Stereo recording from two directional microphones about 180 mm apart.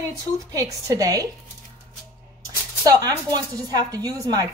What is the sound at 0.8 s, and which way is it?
Speech, 20° right (ahead or behind).